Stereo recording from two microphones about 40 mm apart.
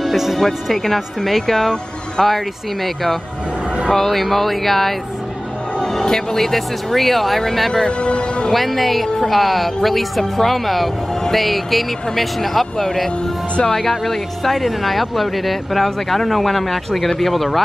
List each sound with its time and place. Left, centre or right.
0.0 s speech: centre
8.0 s speech: left
8.5 s speech: centre